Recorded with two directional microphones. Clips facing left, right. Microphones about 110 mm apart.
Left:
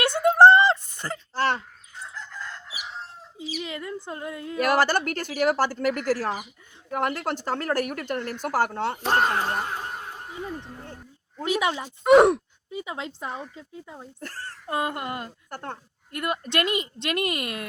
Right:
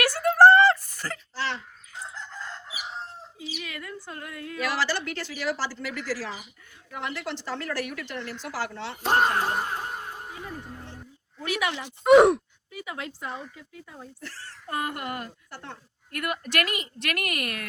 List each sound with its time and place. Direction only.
0.0 s a sound: 20° left (ahead or behind)
1.3 s a sound: 50° left (ahead or behind)
3.3 s a sound: 25° left (ahead or behind)
4.6 s speech: 50° left (ahead or behind)
9.0 s speech: 10° right (ahead or behind)
9.2 s snicker: centre (ahead or behind)
11.4 s a woman's voice: 20° left (ahead or behind)
12.0 s speech: centre (ahead or behind)
12.7 s a woman's voice: 20° left (ahead or behind)
14.2 s speech: 50° left (ahead or behind)
14.7 s a woman's voice: 25° left (ahead or behind)
15.4 s speech: 50° left (ahead or behind)
16.1 s a woman's voice: 25° left (ahead or behind)